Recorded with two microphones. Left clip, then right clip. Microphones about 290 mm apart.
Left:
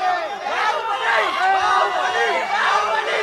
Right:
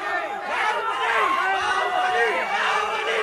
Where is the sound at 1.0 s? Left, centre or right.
Left.